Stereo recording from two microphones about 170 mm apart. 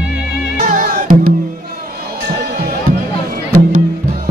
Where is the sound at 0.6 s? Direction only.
55° right (ahead or behind).